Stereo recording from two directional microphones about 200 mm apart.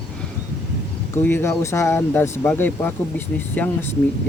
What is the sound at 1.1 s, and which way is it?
Speech, 10° left (ahead or behind).